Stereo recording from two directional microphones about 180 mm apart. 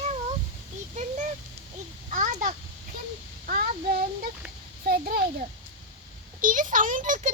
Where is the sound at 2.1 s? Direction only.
45° right (ahead or behind).